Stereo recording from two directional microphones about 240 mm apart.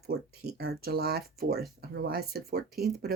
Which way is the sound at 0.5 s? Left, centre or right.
Right.